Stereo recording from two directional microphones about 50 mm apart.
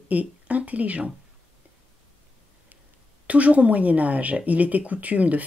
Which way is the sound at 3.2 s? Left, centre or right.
Right.